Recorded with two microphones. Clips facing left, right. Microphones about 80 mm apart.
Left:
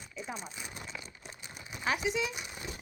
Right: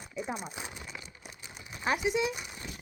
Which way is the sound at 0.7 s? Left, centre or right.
Centre.